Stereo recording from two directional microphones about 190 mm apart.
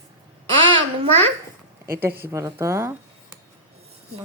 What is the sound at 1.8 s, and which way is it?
A woman's voice, 10° right (ahead or behind).